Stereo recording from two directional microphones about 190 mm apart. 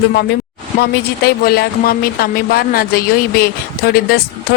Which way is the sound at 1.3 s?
55° left (ahead or behind).